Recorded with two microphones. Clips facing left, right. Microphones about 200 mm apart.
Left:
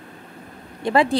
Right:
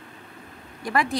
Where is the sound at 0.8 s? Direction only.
25° left (ahead or behind).